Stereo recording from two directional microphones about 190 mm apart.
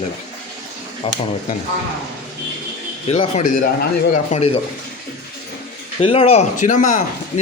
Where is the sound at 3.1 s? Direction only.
35° left (ahead or behind).